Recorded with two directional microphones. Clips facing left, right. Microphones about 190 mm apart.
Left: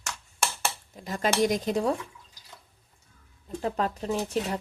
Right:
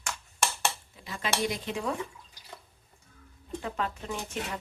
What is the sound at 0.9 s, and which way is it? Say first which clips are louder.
Speech: left 6 dB; 40° left (ahead or behind).